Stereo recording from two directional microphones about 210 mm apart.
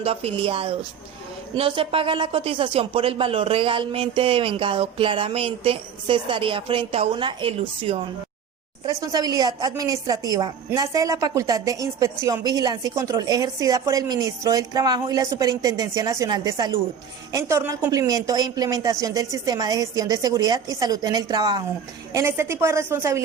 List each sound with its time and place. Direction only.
0.0 s a woman's voice: 25° right (ahead or behind); by 23.2 s 10° right (ahead or behind)